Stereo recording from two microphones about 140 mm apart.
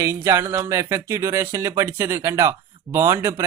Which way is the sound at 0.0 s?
20° right (ahead or behind).